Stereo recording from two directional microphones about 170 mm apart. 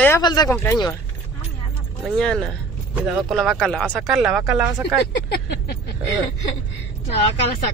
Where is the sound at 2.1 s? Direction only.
5° left (ahead or behind).